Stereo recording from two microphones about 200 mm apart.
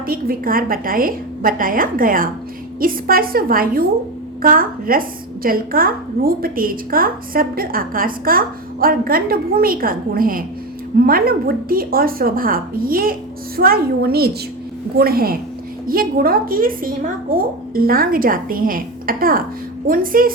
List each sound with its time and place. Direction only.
0.0 s a woman's voice: 45° right (ahead or behind)